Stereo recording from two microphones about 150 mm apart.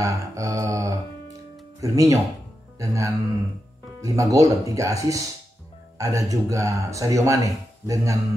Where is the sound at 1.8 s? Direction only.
20° right (ahead or behind).